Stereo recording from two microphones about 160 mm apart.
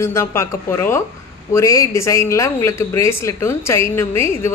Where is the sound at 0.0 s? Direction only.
15° left (ahead or behind).